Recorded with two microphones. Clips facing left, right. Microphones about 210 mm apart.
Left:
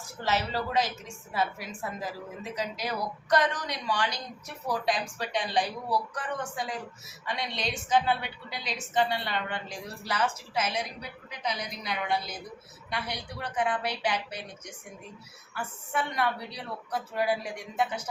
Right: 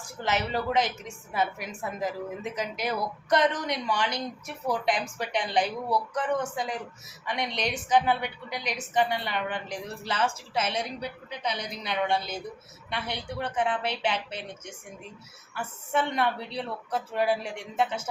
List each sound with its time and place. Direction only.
0.3 s a woman's voice: 20° right (ahead or behind)
15.5 s a woman's voice: 25° right (ahead or behind)